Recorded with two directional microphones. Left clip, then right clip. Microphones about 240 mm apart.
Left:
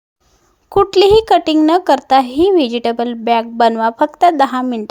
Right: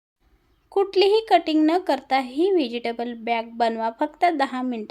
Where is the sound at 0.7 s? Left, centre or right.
Left.